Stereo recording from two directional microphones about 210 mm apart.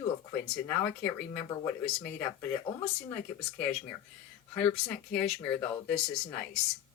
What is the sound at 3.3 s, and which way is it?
Speech, 5° left (ahead or behind).